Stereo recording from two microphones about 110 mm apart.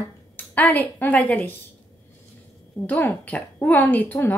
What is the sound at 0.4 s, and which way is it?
A woman's voice, 15° left (ahead or behind).